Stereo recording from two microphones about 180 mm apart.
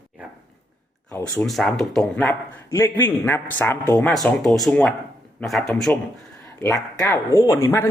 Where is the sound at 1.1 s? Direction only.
10° left (ahead or behind).